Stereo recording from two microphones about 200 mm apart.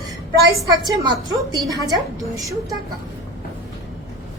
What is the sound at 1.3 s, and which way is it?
A woman's voice, 20° right (ahead or behind).